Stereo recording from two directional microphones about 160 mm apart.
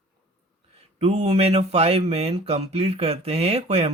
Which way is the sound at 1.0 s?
40° right (ahead or behind).